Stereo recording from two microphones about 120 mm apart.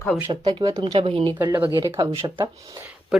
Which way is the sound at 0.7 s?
55° right (ahead or behind).